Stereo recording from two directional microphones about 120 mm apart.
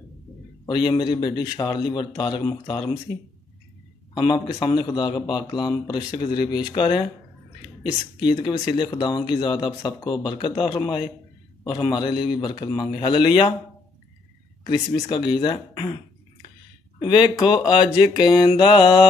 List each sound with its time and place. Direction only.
0.7 s speech: 40° left (ahead or behind)
4.1 s speech: 40° left (ahead or behind)
15.0 s speech: 40° left (ahead or behind)
17.0 s speech: 40° left (ahead or behind)